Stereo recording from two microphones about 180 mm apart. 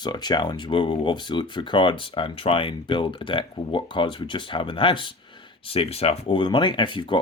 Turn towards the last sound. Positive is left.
turn(degrees=25)  # may be behind; listen again after turning